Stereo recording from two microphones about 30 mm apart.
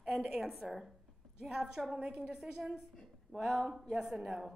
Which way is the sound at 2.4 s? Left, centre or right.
Centre.